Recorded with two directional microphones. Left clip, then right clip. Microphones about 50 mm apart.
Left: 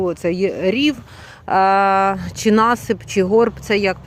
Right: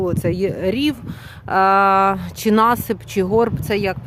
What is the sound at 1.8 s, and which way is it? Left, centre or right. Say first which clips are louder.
Speech: right 1 dB; left.